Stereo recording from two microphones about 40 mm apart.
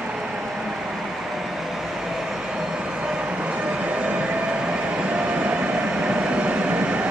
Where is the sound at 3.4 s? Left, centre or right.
Right.